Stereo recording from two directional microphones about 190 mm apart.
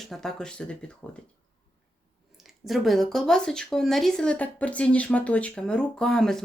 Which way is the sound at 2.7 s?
Centre (ahead or behind).